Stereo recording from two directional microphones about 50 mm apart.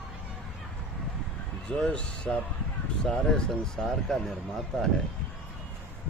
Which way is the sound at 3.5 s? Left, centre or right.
Centre.